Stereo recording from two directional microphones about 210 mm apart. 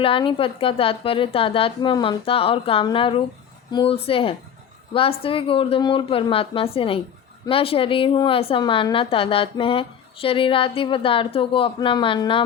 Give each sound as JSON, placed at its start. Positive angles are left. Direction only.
{"t": 0.0, "sound": "a woman's voice", "side_deg": 25}